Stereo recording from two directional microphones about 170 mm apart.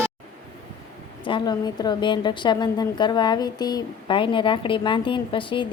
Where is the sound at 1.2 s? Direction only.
25° left (ahead or behind).